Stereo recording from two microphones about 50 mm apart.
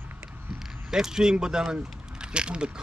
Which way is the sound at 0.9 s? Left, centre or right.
Centre.